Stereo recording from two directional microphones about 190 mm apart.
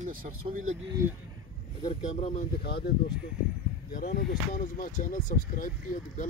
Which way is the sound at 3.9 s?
55° left (ahead or behind).